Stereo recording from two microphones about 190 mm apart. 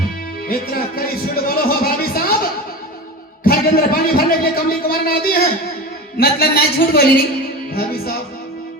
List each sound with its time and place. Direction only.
0.4 s a man's voice: 50° left (ahead or behind)
1.5 s a sound: 50° left (ahead or behind)
3.4 s a man's voice: 50° left (ahead or behind)
7.7 s music: 55° left (ahead or behind)